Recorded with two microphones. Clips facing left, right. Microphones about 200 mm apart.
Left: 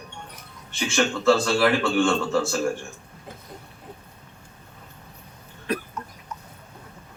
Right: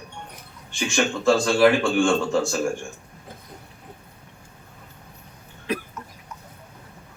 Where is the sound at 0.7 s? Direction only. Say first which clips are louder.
Even; 15° right (ahead or behind).